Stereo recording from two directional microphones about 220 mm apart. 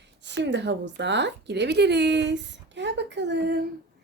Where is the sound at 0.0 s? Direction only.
50° right (ahead or behind).